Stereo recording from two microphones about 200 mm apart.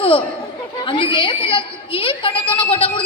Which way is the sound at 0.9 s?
25° left (ahead or behind).